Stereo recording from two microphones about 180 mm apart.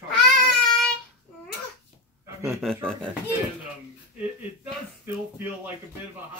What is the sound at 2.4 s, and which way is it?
Speech, centre (ahead or behind).